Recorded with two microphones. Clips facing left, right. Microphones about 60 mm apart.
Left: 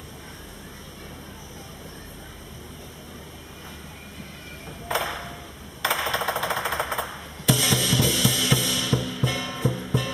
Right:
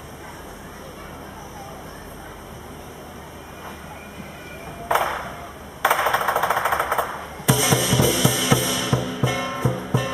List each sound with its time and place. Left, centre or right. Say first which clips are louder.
4.8 s ping: right 6 dB; centre
5.8 s typewriter: right 6 dB; centre
7.4 s music: right 3 dB; centre